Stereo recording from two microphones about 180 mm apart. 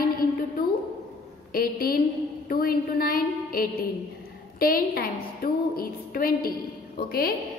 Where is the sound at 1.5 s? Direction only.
55° left (ahead or behind).